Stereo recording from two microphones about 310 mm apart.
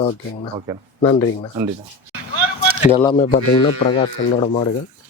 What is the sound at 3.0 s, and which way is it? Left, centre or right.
Speech, centre.